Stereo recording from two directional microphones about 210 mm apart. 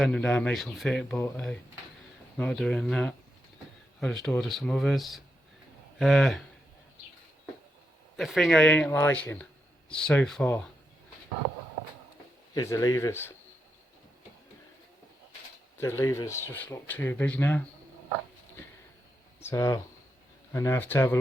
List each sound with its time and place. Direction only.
0.0 s speech: 5° left (ahead or behind)
8.1 s speech: centre (ahead or behind)
12.5 s speech: 15° left (ahead or behind)
15.8 s speech: 15° left (ahead or behind)
19.4 s speech: 15° left (ahead or behind)